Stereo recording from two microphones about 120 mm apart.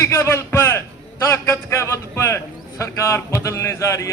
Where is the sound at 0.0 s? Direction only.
20° left (ahead or behind).